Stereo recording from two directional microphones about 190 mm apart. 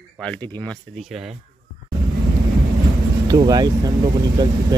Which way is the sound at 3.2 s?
20° right (ahead or behind).